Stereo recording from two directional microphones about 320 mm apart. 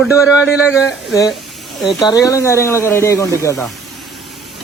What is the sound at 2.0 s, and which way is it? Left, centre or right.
Speech, centre.